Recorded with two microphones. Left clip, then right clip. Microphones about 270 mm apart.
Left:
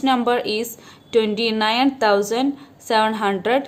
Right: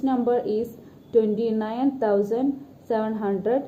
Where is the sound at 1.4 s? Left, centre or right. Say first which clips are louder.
Left 7 dB; left.